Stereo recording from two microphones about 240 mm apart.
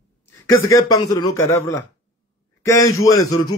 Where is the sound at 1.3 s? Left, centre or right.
Left.